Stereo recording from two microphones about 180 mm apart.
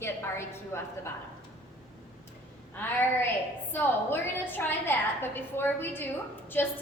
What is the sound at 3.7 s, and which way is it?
A woman's voice, 10° left (ahead or behind).